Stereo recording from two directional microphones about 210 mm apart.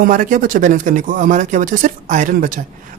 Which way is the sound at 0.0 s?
40° right (ahead or behind).